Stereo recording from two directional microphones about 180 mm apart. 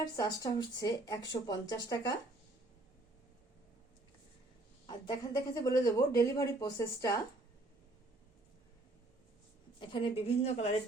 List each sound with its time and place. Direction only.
0.2 s speech: 20° left (ahead or behind)
4.9 s speech: 20° left (ahead or behind)
9.9 s a woman's voice: 30° left (ahead or behind)